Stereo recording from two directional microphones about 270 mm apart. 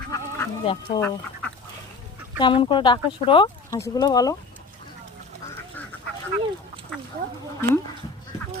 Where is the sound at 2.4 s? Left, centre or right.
Centre.